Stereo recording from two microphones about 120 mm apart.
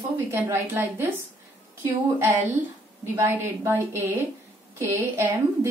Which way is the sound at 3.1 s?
20° right (ahead or behind).